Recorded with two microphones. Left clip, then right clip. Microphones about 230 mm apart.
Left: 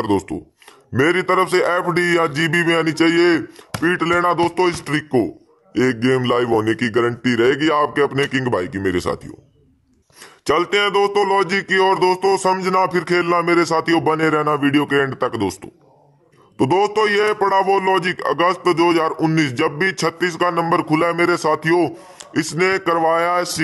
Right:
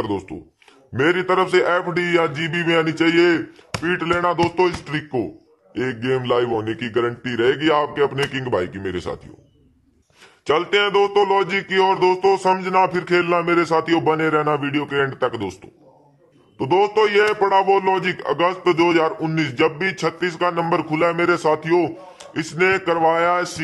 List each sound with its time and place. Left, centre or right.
0.0 s a man's voice: left
10.4 s a man's voice: left